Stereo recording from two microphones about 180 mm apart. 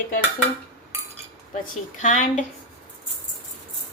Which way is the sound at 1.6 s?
45° left (ahead or behind).